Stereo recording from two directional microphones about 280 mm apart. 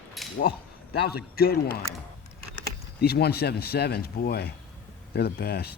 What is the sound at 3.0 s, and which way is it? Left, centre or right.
Speech, left.